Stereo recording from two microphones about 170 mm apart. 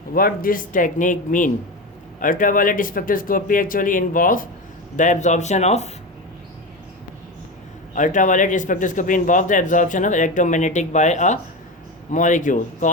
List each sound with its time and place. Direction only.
0.1 s speech: 60° left (ahead or behind); by 5.9 s 40° left (ahead or behind)
7.9 s speech: 50° left (ahead or behind)